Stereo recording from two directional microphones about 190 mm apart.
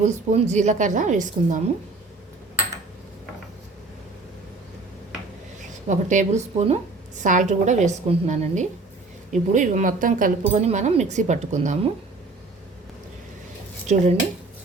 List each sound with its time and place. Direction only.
0.0 s speech: 35° right (ahead or behind)
5.5 s speech: 40° right (ahead or behind)
13.8 s speech: 40° right (ahead or behind)